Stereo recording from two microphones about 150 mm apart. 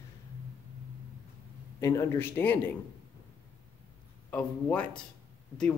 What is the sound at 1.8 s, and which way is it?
Speech, 20° left (ahead or behind).